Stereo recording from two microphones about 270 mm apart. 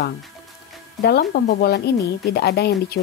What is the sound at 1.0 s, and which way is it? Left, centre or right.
Speech, left.